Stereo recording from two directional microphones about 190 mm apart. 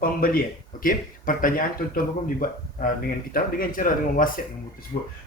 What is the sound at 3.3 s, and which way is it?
Speech, 45° left (ahead or behind).